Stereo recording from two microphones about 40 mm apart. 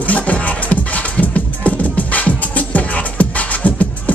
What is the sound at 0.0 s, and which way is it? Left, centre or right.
Music, left.